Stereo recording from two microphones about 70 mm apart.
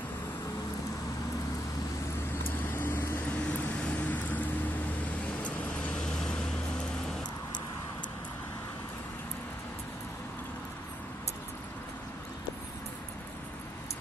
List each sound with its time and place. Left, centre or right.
2.7 s vehicle: left
3.3 s vehicle: centre
5.9 s vehicle: centre